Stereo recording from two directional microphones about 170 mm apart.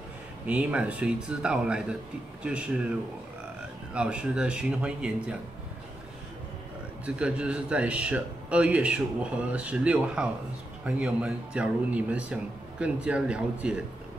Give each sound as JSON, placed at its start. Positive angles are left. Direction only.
{"t": 0.5, "sound": "a man's voice", "side_deg": -5}
{"t": 3.9, "sound": "a man's voice", "side_deg": -5}
{"t": 7.1, "sound": "a man's voice", "side_deg": -5}